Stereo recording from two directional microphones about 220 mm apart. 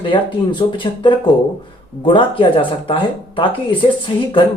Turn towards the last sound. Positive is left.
turn(degrees=20)  # may be behind; listen again after turning